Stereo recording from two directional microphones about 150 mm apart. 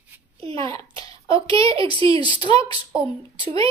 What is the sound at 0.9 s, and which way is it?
Speech, 40° right (ahead or behind).